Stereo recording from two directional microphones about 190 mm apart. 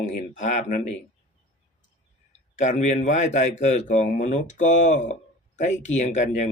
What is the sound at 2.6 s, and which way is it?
Speech, 40° left (ahead or behind).